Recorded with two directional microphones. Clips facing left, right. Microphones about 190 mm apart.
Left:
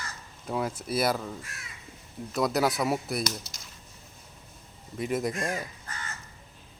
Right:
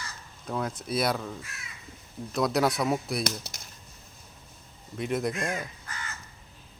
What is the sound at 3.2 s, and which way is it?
Speech, 55° right (ahead or behind).